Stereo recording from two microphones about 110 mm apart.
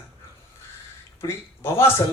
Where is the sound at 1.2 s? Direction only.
20° left (ahead or behind).